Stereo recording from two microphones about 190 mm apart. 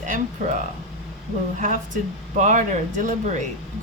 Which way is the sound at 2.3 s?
40° right (ahead or behind).